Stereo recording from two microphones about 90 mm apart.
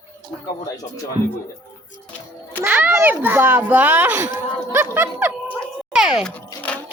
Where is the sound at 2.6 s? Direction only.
20° right (ahead or behind).